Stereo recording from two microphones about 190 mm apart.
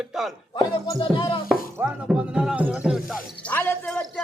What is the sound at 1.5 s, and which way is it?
Speech, 5° right (ahead or behind).